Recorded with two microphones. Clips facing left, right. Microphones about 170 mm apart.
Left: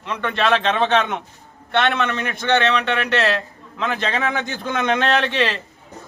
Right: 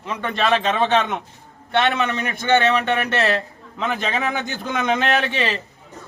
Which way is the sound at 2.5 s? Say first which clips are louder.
Right 2 dB; 20° right (ahead or behind).